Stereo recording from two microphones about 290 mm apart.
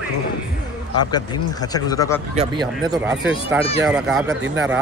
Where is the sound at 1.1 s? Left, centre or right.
Centre.